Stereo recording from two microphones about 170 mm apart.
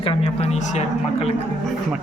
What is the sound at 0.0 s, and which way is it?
Speech, 35° left (ahead or behind).